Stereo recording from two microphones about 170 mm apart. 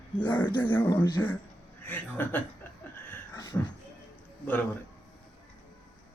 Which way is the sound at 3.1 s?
20° left (ahead or behind).